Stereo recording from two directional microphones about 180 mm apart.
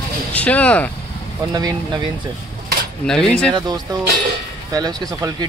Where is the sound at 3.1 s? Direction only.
5° left (ahead or behind).